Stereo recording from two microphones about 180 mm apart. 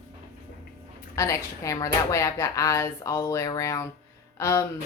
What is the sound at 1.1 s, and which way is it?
A woman's voice, 15° left (ahead or behind).